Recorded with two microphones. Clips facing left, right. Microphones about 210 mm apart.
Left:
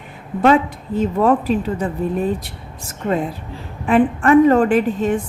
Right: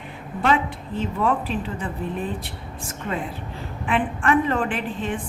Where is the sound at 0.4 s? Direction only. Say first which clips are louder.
Left 7 dB; 40° left (ahead or behind).